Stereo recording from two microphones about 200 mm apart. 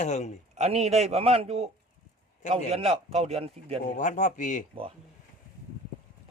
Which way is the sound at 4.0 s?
40° left (ahead or behind).